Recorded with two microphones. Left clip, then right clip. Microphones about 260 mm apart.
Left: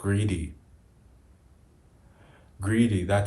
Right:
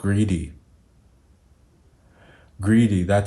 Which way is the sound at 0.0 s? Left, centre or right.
Right.